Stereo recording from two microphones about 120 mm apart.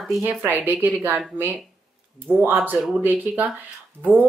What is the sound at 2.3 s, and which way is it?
Speech, 15° right (ahead or behind).